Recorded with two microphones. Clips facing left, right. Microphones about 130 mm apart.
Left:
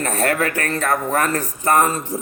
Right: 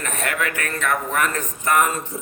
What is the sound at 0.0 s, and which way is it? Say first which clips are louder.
A man's voice: left 6 dB; 35° left (ahead or behind).